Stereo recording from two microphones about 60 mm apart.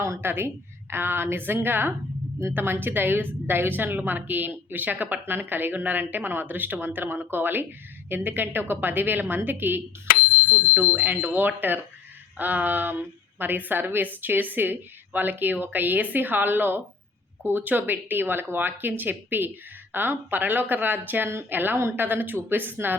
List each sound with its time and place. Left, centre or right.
0.2 s a woman's voice: right